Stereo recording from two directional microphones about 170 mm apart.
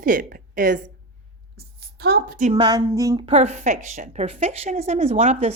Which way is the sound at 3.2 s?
40° right (ahead or behind).